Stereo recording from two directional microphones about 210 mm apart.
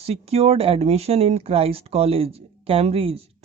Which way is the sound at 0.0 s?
30° right (ahead or behind).